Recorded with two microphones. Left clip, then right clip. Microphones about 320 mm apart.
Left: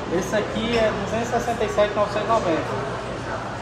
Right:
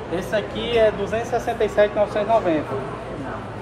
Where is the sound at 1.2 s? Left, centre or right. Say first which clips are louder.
Right 1 dB; right.